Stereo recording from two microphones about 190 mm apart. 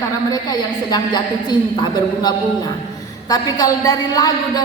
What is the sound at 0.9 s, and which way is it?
A woman's voice, 20° left (ahead or behind).